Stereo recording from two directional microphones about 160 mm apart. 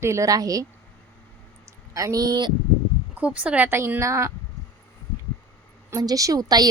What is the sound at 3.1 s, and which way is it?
A woman's voice, 10° right (ahead or behind).